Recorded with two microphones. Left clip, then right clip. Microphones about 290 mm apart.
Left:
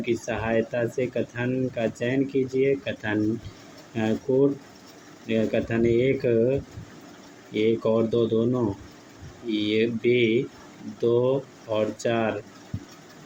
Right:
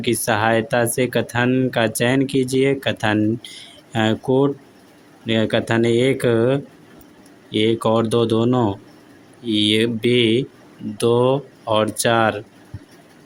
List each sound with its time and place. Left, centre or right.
0.0 s speech: right